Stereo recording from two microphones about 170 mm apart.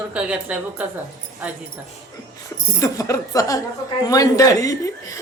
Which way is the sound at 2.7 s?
20° left (ahead or behind).